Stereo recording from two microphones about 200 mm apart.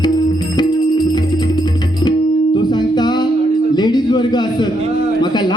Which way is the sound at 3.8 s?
20° left (ahead or behind).